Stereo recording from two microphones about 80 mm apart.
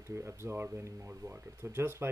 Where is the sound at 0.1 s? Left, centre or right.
Right.